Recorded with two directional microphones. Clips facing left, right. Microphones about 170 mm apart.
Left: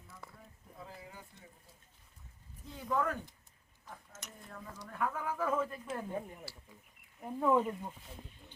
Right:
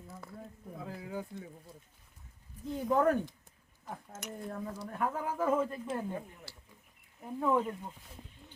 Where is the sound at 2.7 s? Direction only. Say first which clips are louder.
Right 7 dB; 40° right (ahead or behind).